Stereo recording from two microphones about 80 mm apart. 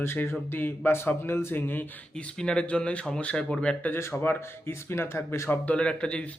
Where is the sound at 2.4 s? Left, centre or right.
Centre.